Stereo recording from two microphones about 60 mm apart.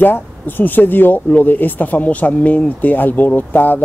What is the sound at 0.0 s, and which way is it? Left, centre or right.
Speech, left.